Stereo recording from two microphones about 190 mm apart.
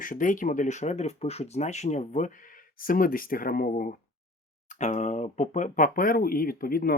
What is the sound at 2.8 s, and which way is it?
Speech, 50° left (ahead or behind).